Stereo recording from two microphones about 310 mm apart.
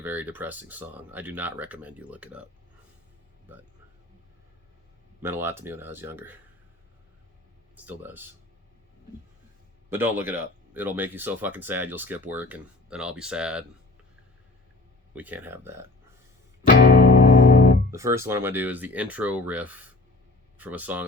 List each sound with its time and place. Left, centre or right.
0.0 s speech: centre
5.2 s speech: centre
7.9 s speech: centre
9.9 s speech: centre
15.1 s speech: centre
16.6 s music: left
17.9 s speech: centre